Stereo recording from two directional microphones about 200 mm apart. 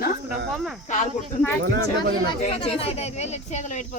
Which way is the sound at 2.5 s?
30° left (ahead or behind).